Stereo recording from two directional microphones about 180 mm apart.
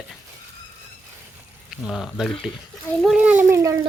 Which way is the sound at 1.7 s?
Centre (ahead or behind).